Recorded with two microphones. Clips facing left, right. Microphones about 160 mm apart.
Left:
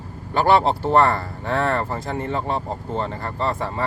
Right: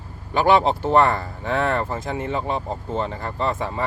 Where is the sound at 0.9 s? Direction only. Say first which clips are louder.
Even; 20° right (ahead or behind).